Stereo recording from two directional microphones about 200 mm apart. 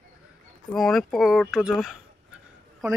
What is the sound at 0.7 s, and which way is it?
Speech, centre (ahead or behind).